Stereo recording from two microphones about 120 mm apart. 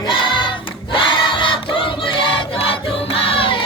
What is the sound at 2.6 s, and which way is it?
Music, 50° left (ahead or behind).